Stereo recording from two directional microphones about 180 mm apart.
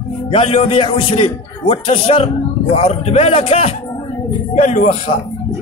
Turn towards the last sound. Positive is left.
turn(degrees=40)  # may be behind; listen again after turning